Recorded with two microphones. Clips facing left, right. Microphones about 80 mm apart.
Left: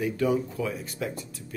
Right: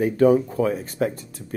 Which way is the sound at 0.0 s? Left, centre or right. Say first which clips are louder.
Right 9 dB; right.